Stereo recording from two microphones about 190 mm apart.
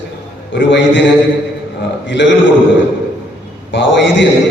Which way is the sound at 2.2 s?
70° left (ahead or behind).